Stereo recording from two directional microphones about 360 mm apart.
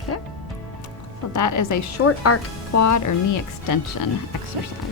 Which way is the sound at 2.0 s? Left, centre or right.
Left.